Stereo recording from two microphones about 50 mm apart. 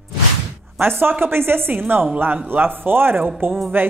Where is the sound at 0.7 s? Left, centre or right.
Right.